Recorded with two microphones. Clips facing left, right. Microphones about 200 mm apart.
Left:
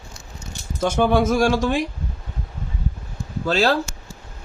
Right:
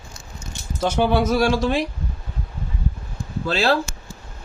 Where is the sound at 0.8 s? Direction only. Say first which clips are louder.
Left 1 dB; 50° left (ahead or behind).